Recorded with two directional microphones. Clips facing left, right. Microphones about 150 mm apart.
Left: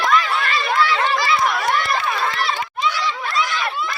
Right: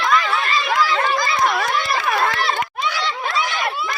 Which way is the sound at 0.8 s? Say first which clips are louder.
Left 2 dB; 40° right (ahead or behind).